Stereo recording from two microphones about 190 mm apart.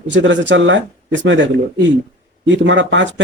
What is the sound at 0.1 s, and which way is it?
Speech, 75° right (ahead or behind).